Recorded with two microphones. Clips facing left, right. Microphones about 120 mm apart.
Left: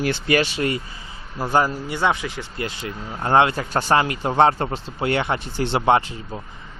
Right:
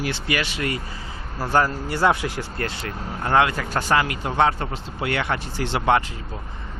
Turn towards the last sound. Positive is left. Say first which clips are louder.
# left 2 dB
turn(degrees=25)  # may be behind; listen again after turning